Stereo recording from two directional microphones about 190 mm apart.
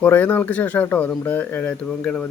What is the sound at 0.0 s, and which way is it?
Speech, 10° left (ahead or behind).